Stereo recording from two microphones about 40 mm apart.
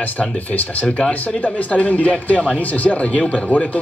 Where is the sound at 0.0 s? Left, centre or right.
Left.